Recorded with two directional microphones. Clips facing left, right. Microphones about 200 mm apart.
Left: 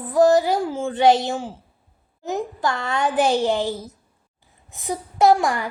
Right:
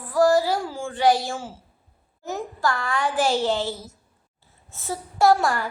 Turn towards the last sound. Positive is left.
turn(degrees=15)  # may be behind; listen again after turning